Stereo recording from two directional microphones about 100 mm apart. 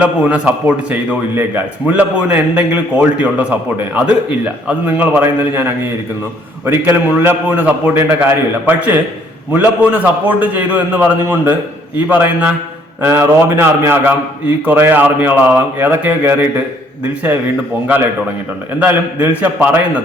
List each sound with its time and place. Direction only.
0.0 s a man's voice: 15° right (ahead or behind)
18.8 s speech: 15° right (ahead or behind)